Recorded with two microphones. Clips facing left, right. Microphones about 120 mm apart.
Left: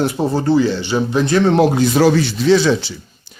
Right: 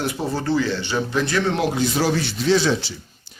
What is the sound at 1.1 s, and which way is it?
Speech, 25° left (ahead or behind).